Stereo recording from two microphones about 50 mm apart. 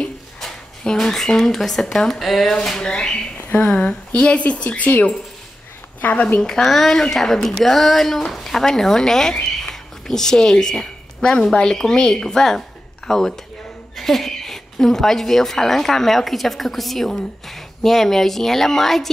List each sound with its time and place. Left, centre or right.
0.8 s speech: centre
2.6 s a woman's voice: centre; by 6.2 s left
6.4 s a woman's voice: centre